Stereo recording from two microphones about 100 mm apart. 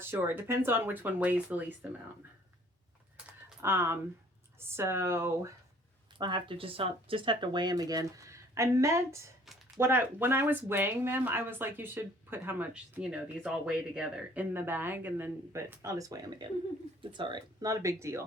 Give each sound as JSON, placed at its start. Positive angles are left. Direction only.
{"t": 0.0, "sound": "speech", "side_deg": -20}
{"t": 3.6, "sound": "speech", "side_deg": -25}
{"t": 6.1, "sound": "speech", "side_deg": -50}
{"t": 14.5, "sound": "speech", "side_deg": -20}
{"t": 15.8, "sound": "speech", "side_deg": -35}
{"t": 17.0, "sound": "speech", "side_deg": -55}
{"t": 17.6, "sound": "speech", "side_deg": -35}